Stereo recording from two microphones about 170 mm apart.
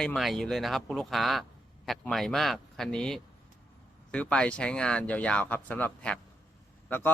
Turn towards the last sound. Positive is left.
turn(degrees=10)  # may be behind; listen again after turning